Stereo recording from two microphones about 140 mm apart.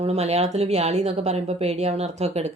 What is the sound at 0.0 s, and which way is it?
A woman's voice, 50° right (ahead or behind).